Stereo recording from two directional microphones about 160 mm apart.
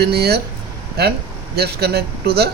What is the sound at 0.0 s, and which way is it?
Speech, 90° right.